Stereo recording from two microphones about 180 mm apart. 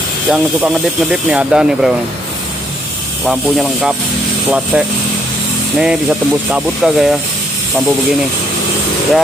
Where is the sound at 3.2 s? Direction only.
Centre (ahead or behind).